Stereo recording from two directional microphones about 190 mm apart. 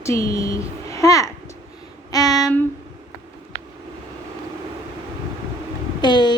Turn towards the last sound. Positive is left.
turn(degrees=25)  # may be behind; listen again after turning